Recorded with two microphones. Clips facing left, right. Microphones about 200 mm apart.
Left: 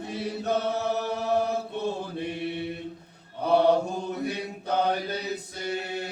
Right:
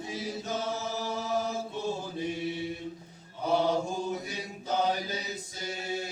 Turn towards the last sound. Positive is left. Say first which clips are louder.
# left 3 dB
turn(degrees=60)  # may be behind; listen again after turning